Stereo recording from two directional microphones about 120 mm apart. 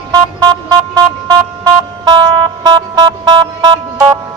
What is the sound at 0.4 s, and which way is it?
Vehicle, 40° right (ahead or behind).